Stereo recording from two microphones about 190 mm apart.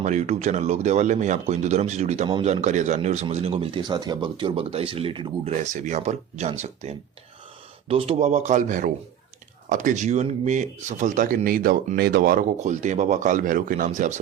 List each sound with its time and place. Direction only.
0.0 s speech: 40° right (ahead or behind)
5.6 s speech: 40° right (ahead or behind)